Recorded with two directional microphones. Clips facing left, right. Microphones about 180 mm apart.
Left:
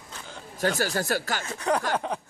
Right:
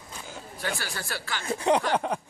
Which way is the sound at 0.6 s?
40° left (ahead or behind).